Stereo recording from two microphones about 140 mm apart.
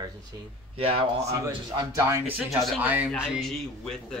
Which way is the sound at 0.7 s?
45° right (ahead or behind).